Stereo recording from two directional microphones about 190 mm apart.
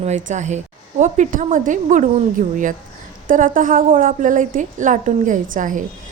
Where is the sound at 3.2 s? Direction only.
45° right (ahead or behind).